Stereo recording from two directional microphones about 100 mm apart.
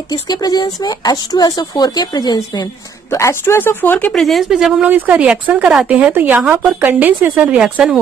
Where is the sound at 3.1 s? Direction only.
30° left (ahead or behind).